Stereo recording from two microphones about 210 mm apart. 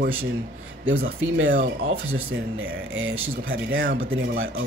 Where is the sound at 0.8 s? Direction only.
60° right (ahead or behind).